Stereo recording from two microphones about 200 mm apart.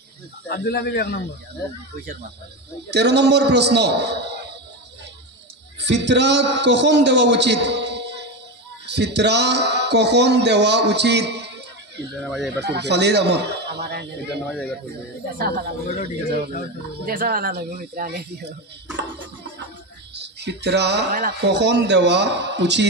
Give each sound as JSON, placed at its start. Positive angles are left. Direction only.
{"t": 0.5, "sound": "speech", "side_deg": 50}
{"t": 2.9, "sound": "a man's voice", "side_deg": -55}
{"t": 5.8, "sound": "a man's voice", "side_deg": -60}
{"t": 12.2, "sound": "speech", "side_deg": 0}
{"t": 12.5, "sound": "a man's voice", "side_deg": -55}
{"t": 14.5, "sound": "speech", "side_deg": 5}
{"t": 15.3, "sound": "speech", "side_deg": -50}
{"t": 17.0, "sound": "speech", "side_deg": -45}
{"t": 20.2, "sound": "a man's voice", "side_deg": -55}